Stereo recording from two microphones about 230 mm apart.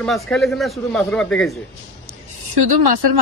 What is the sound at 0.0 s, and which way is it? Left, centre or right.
A man's voice, centre.